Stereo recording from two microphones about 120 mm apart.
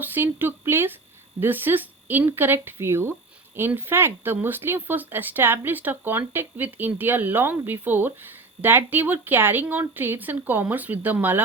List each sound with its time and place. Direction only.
0.0 s speech: 15° right (ahead or behind)